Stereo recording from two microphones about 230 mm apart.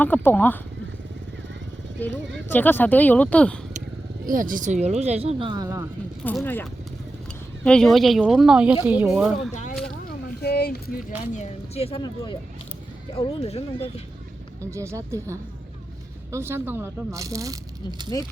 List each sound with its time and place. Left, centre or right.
0.0 s speech: centre
2.3 s speech: centre
4.3 s speech: right; by 5.8 s centre
6.2 s speech: centre
9.4 s speech: left
10.4 s speech: left
11.3 s speech: left
14.7 s speech: centre